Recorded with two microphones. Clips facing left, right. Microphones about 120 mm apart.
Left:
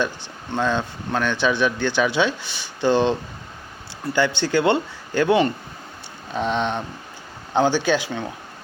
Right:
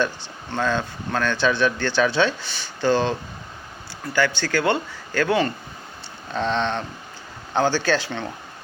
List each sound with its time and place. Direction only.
0.0 s speech: 15° left (ahead or behind)